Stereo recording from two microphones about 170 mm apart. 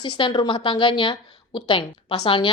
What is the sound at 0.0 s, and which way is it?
A woman's voice, 30° left (ahead or behind).